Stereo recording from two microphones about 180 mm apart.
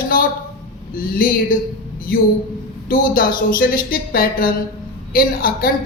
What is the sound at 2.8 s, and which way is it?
A woman's voice, 55° left (ahead or behind).